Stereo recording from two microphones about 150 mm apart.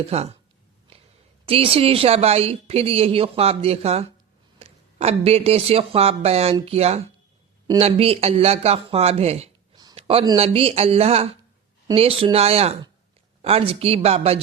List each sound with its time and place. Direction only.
0.1 s speech: 45° right (ahead or behind)
1.5 s a woman's voice: 40° right (ahead or behind)
9.9 s a sound: 40° right (ahead or behind)
10.3 s a woman's voice: 40° right (ahead or behind)